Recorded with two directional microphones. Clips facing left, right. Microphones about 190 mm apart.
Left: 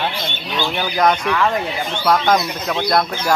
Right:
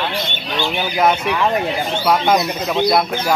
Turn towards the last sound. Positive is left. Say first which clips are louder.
# right 2 dB
turn(degrees=-10)  # may be behind; listen again after turning